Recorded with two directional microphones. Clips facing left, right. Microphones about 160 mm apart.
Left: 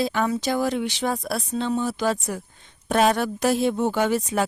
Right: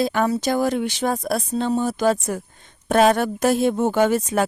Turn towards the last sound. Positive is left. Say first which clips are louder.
# right 4 dB
turn(degrees=-50)  # may be behind; listen again after turning